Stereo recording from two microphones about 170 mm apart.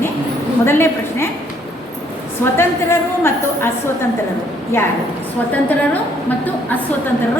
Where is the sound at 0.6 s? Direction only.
15° left (ahead or behind).